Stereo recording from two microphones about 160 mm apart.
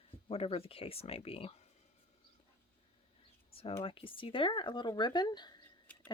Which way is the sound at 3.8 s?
35° left (ahead or behind).